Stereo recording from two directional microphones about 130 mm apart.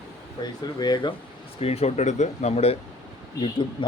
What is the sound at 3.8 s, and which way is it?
Speech, 40° left (ahead or behind).